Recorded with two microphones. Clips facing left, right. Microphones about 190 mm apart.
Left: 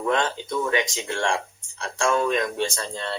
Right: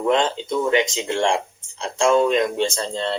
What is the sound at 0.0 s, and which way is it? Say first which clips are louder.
Speech: right 4 dB; 20° right (ahead or behind).